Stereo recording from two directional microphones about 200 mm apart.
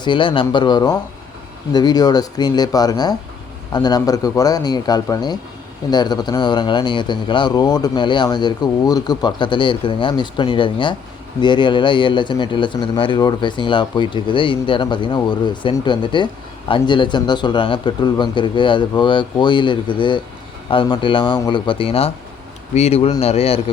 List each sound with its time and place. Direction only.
0.0 s speech: 25° left (ahead or behind)